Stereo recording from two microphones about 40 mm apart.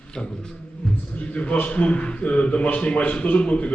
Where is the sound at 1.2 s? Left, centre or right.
Left.